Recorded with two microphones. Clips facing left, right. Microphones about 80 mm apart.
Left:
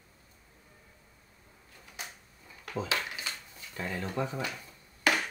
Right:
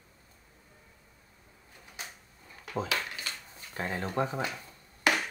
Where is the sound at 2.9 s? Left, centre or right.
Centre.